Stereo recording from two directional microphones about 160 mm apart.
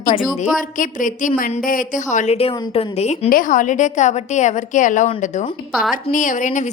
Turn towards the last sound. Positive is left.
turn(degrees=50)  # may be behind; listen again after turning